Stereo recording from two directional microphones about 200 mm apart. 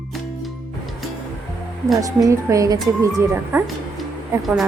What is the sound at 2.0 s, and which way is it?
A woman's voice, 15° right (ahead or behind).